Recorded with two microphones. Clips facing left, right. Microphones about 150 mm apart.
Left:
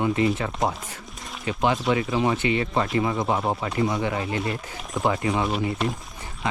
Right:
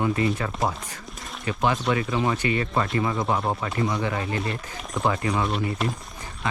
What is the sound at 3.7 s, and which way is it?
Speech, 20° left (ahead or behind).